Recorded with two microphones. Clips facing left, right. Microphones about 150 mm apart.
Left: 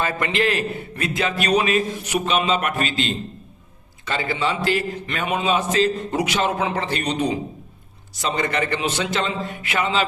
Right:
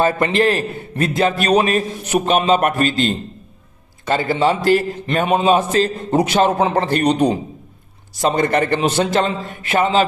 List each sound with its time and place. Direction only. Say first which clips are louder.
0.0 s a man's voice: right 6 dB; 40° right (ahead or behind)